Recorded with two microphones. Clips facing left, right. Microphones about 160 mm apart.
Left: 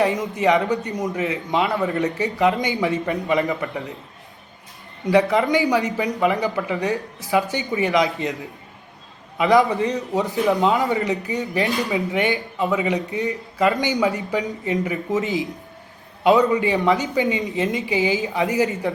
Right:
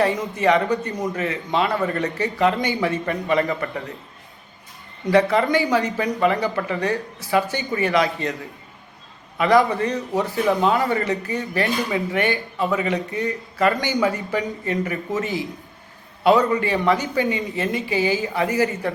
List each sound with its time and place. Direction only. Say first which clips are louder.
0.0 s speech: even; 15° left (ahead or behind)
5.1 s speech: even; 15° left (ahead or behind)
9.4 s speech: left 1 dB; 20° left (ahead or behind)
16.5 s speech: left 1 dB; 20° left (ahead or behind)